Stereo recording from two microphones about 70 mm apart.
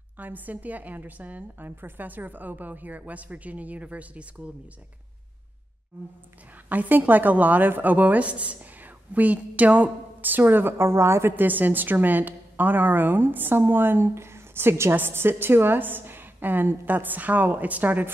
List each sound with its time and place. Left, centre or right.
0.2 s speech: right
6.7 s speech: right